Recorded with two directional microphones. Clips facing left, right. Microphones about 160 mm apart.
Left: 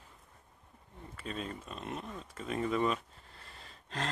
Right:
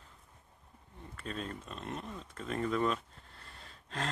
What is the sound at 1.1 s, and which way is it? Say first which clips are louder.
Speech: even; 5° left (ahead or behind).